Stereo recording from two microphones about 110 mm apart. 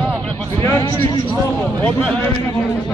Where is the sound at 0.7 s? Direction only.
35° left (ahead or behind).